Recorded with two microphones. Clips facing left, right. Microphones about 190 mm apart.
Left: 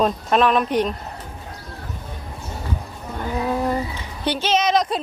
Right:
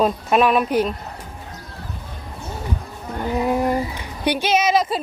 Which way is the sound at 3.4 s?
10° right (ahead or behind).